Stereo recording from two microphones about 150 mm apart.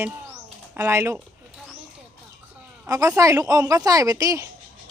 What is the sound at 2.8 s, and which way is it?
Speech, 20° right (ahead or behind).